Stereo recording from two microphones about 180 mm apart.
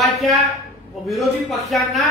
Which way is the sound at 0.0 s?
Centre (ahead or behind).